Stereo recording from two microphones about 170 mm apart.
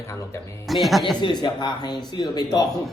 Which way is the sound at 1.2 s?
25° left (ahead or behind).